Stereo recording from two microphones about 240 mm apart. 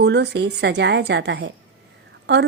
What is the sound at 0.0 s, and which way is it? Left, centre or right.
Speech, right.